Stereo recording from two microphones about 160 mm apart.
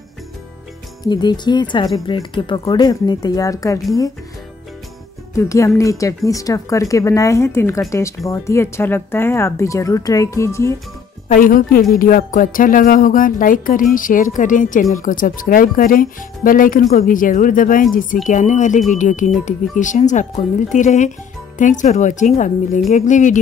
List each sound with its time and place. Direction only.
1.0 s speech: 25° left (ahead or behind)
5.3 s speech: 20° left (ahead or behind)
11.3 s speech: 60° left (ahead or behind)